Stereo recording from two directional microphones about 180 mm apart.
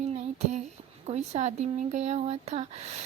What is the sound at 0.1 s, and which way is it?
Speech, 40° right (ahead or behind).